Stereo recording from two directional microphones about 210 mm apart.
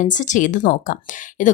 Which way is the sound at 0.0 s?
35° left (ahead or behind).